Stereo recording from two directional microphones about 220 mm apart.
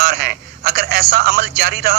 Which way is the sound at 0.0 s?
45° right (ahead or behind).